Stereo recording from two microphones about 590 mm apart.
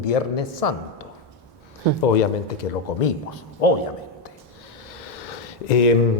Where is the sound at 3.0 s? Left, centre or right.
Left.